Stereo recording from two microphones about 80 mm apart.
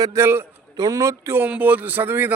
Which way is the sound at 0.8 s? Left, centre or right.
Right.